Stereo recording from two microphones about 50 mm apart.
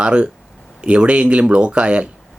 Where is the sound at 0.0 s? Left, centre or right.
Right.